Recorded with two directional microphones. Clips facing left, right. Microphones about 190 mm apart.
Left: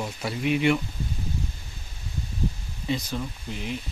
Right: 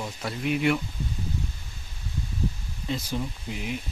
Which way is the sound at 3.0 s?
10° right (ahead or behind).